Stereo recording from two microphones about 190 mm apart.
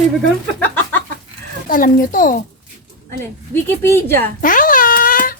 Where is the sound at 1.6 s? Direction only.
45° left (ahead or behind).